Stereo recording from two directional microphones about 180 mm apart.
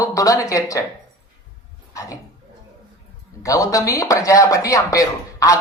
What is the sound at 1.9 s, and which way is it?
Speech, 20° left (ahead or behind).